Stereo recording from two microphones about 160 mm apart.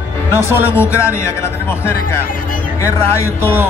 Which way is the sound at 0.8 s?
15° left (ahead or behind).